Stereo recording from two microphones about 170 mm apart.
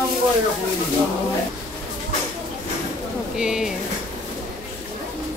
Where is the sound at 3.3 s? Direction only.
5° right (ahead or behind).